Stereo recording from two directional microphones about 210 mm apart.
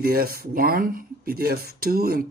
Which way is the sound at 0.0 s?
45° right (ahead or behind).